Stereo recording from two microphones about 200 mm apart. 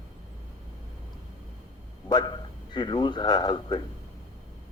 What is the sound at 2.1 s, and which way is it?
A man's voice, 20° left (ahead or behind).